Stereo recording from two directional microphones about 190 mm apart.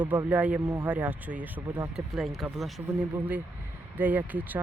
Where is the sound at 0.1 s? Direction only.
10° right (ahead or behind).